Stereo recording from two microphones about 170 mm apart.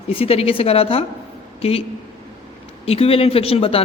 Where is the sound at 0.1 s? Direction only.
35° left (ahead or behind).